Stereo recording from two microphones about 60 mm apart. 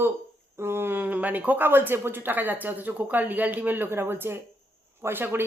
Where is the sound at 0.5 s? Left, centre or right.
Right.